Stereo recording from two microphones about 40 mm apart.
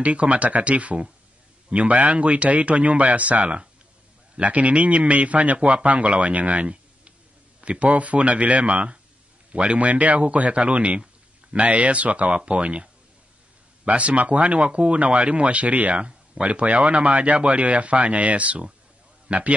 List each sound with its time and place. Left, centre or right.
0.0 s a man's voice: right